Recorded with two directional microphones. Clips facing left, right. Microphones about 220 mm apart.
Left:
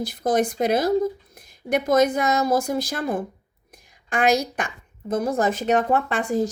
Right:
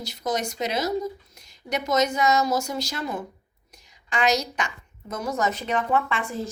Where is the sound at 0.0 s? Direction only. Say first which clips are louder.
Left 7 dB; 55° left (ahead or behind).